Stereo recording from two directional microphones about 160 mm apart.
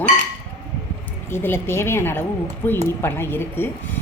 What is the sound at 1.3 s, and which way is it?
A woman's voice, 15° left (ahead or behind).